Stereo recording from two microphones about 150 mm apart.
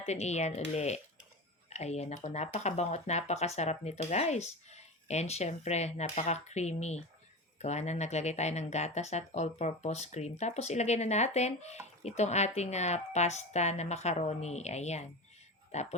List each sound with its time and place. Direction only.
0.0 s speech: 50° left (ahead or behind)